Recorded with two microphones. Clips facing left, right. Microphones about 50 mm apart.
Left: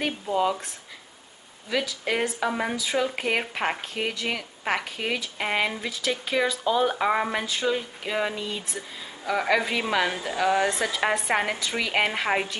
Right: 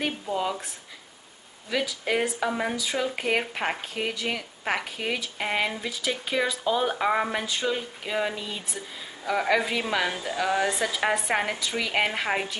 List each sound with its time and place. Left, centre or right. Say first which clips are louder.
0.3 s speech: left 6 dB; centre
1.7 s speech: even; centre